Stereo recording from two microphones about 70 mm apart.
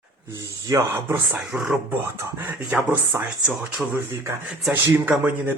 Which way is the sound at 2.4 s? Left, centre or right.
Right.